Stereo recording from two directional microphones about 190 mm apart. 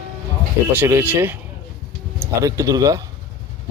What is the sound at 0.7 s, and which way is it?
Speech, 10° right (ahead or behind).